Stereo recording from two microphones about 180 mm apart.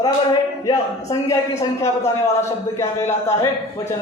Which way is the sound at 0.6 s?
20° left (ahead or behind).